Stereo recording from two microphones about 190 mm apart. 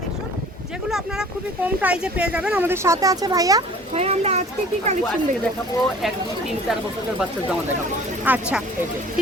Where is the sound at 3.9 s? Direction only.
35° right (ahead or behind).